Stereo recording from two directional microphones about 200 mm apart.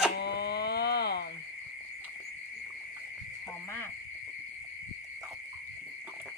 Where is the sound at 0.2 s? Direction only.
55° left (ahead or behind).